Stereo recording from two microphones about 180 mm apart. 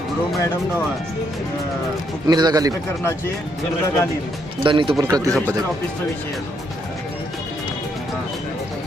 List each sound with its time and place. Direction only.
2.2 s a man's voice: 20° right (ahead or behind)
4.6 s a man's voice: 30° right (ahead or behind)